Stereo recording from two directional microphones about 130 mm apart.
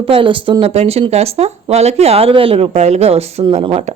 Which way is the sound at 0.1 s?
40° right (ahead or behind).